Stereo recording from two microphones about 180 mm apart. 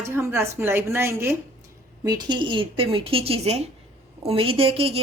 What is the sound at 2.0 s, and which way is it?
A woman's voice, 25° right (ahead or behind).